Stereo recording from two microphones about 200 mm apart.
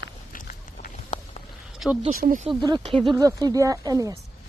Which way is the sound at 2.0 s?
45° right (ahead or behind).